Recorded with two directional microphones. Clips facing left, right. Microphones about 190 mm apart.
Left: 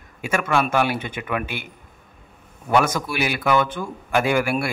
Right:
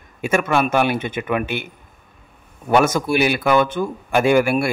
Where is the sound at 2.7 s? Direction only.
25° right (ahead or behind).